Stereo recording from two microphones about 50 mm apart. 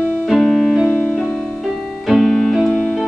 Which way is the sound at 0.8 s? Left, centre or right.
Centre.